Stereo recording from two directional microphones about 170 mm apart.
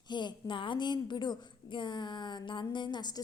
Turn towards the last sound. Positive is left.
turn(degrees=25)  # may be behind; listen again after turning